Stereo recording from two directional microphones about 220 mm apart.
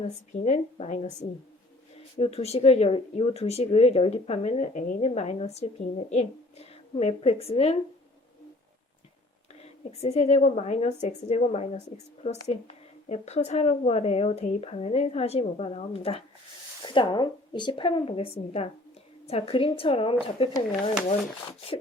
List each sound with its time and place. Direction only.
0.1 s a woman's voice: 30° left (ahead or behind)
9.6 s a woman's voice: 30° left (ahead or behind)